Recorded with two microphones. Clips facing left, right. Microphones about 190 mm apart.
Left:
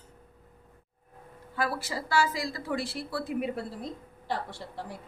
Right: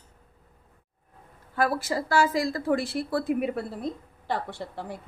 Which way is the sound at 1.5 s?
50° right (ahead or behind).